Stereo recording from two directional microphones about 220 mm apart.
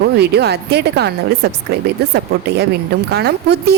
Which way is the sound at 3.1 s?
50° right (ahead or behind).